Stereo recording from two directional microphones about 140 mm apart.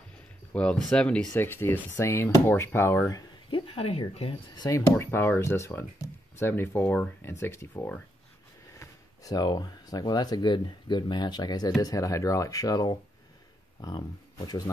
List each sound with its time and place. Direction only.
0.5 s speech: 5° left (ahead or behind)
3.4 s speech: 35° left (ahead or behind)
4.6 s speech: 25° left (ahead or behind)
8.7 s speech: 25° left (ahead or behind)